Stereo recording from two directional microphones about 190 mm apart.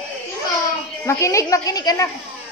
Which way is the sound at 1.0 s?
15° left (ahead or behind).